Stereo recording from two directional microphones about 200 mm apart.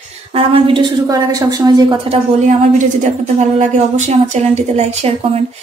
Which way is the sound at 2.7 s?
40° right (ahead or behind).